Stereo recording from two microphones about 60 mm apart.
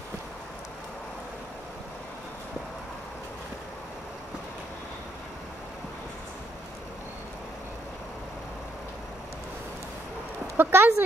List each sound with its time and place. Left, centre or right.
10.6 s speech: right